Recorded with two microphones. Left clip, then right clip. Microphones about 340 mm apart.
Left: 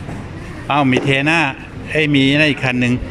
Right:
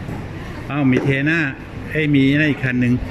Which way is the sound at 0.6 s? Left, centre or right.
Centre.